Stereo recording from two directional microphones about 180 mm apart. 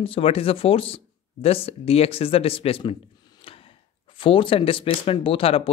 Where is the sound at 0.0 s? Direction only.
30° left (ahead or behind).